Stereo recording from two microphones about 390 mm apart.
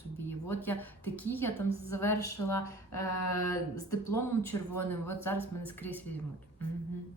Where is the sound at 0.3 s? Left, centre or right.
Centre.